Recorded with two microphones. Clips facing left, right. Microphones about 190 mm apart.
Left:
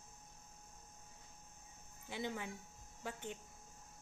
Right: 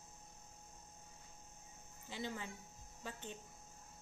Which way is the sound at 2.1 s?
15° left (ahead or behind).